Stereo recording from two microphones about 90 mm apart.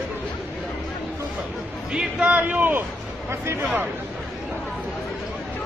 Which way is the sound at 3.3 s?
30° right (ahead or behind).